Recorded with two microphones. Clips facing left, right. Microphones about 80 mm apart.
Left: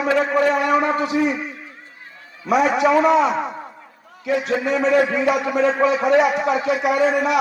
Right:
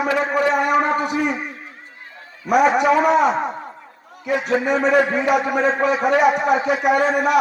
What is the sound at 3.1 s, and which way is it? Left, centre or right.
Speech, right.